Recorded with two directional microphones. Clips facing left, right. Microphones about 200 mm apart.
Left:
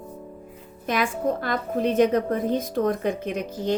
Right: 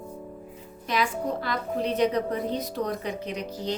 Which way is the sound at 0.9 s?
50° left (ahead or behind).